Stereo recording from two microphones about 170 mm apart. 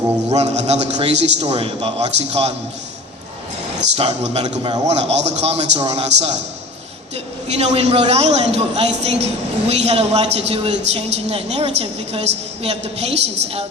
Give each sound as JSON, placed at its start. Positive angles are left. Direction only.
{"t": 0.3, "sound": "a man's voice", "side_deg": -40}
{"t": 3.9, "sound": "a man's voice", "side_deg": -35}
{"t": 7.4, "sound": "a man's voice", "side_deg": -40}